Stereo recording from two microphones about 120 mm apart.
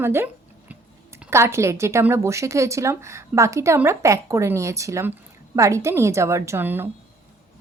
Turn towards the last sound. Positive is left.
turn(degrees=-15)  # may be behind; listen again after turning